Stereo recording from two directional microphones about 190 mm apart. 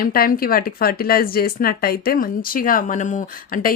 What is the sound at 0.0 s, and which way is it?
Speech, 50° left (ahead or behind).